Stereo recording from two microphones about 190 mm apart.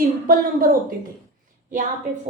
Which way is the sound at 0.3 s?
50° right (ahead or behind).